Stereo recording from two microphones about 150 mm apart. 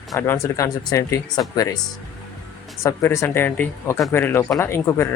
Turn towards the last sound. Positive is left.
turn(degrees=15)  # may be behind; listen again after turning